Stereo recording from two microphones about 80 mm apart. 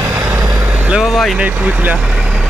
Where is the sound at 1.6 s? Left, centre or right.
Right.